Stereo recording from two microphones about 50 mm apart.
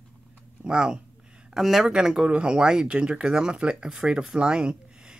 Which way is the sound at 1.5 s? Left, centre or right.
Centre.